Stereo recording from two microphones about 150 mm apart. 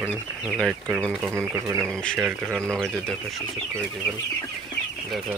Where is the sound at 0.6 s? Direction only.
Centre (ahead or behind).